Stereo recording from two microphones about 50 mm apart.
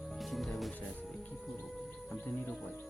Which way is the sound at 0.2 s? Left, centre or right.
Centre.